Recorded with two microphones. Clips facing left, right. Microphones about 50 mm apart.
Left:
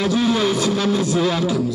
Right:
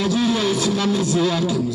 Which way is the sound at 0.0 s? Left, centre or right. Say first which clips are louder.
Left 1 dB; left.